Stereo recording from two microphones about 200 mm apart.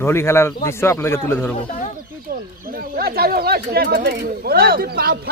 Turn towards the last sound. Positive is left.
turn(degrees=-50)  # may be behind; listen again after turning